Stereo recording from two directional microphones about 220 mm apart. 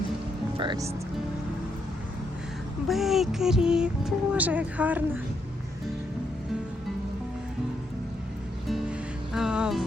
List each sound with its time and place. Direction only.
0.5 s speech: 20° right (ahead or behind)
2.8 s speech: centre (ahead or behind)
8.6 s music: centre (ahead or behind)